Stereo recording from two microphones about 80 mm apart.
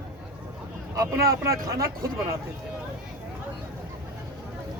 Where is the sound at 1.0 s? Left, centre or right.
Right.